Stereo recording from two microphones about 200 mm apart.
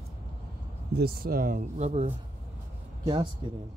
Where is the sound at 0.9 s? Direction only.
50° right (ahead or behind); by 3.3 s 20° right (ahead or behind).